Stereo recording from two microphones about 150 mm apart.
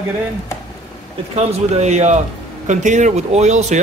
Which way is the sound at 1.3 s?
45° right (ahead or behind).